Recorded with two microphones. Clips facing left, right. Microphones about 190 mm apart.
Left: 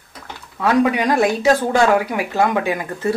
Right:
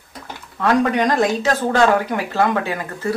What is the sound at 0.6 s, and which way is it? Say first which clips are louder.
Speech: left 1 dB; 10° left (ahead or behind).